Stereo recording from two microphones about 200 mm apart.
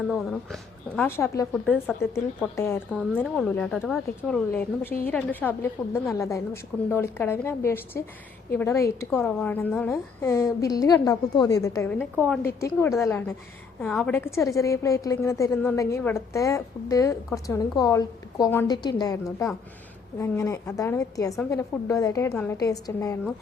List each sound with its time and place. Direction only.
0.1 s a woman's voice: centre (ahead or behind)